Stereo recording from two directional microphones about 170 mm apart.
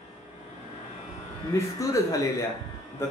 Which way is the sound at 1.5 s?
20° left (ahead or behind).